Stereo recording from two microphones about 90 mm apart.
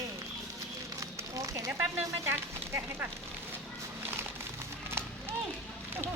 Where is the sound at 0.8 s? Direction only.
35° right (ahead or behind).